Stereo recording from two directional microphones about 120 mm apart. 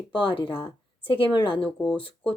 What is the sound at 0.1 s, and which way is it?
Speech, 45° left (ahead or behind).